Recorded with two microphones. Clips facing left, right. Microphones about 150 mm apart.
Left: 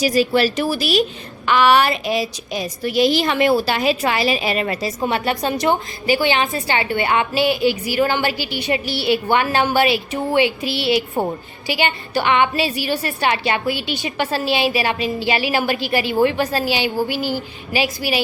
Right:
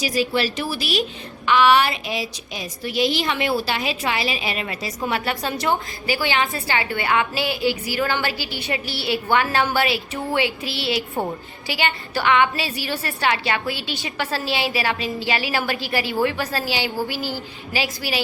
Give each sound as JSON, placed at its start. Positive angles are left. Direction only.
{"t": 0.0, "sound": "a woman's voice", "side_deg": 45}
{"t": 4.9, "sound": "a woman's voice", "side_deg": 25}